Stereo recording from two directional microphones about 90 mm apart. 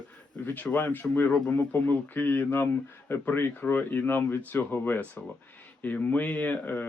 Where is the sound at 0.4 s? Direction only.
20° left (ahead or behind).